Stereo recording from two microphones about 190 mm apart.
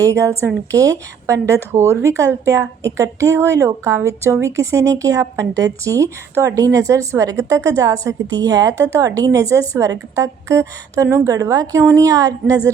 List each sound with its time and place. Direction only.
0.0 s a woman's voice: 15° right (ahead or behind)